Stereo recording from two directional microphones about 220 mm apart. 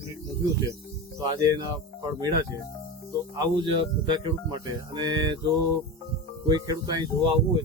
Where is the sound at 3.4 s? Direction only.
20° right (ahead or behind).